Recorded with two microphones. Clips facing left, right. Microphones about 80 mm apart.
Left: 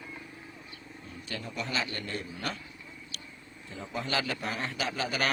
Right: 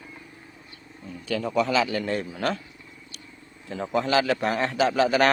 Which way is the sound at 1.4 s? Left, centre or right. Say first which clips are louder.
Right 12 dB; right.